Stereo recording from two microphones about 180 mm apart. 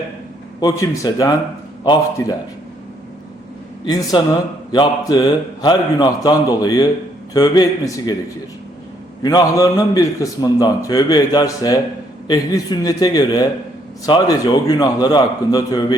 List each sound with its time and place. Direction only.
0.6 s a man's voice: 20° left (ahead or behind)
4.1 s a man's voice: 25° left (ahead or behind)
9.2 s a man's voice: 20° left (ahead or behind)